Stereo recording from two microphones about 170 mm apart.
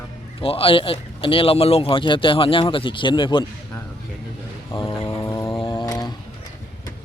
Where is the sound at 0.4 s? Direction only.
35° left (ahead or behind).